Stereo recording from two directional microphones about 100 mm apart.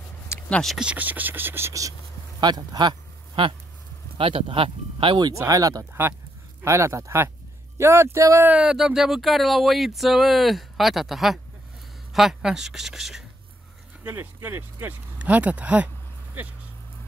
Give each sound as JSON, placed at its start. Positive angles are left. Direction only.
{"t": 0.5, "sound": "speech", "side_deg": 5}
{"t": 0.7, "sound": "speech", "side_deg": -15}
{"t": 2.4, "sound": "speech", "side_deg": -45}
{"t": 5.3, "sound": "speech", "side_deg": -35}
{"t": 8.5, "sound": "a sound", "side_deg": -10}
{"t": 14.0, "sound": "speech", "side_deg": -20}